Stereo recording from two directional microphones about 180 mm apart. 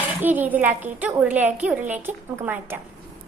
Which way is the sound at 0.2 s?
10° right (ahead or behind).